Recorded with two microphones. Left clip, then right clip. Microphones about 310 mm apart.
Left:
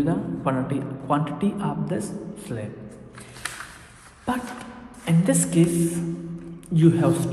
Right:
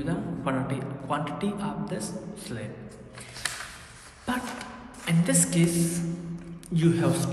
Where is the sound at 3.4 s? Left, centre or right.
Centre.